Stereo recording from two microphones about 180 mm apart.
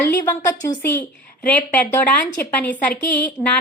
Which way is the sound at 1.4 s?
10° left (ahead or behind).